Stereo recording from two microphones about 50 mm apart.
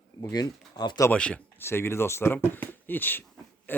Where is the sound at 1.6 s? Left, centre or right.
Left.